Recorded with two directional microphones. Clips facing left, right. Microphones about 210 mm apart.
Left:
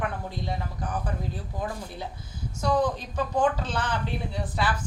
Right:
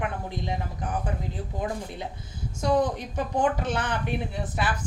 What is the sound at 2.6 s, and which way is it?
Speech, 20° right (ahead or behind).